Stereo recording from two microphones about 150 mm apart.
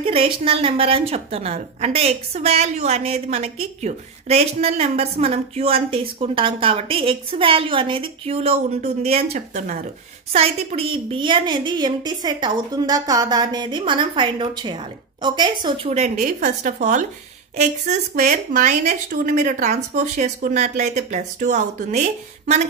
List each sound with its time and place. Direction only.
0.0 s a woman's voice: 40° right (ahead or behind)
15.9 s a woman's voice: 50° right (ahead or behind)